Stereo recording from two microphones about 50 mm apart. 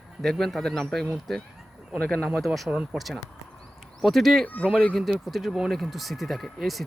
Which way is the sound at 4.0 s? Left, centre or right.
Centre.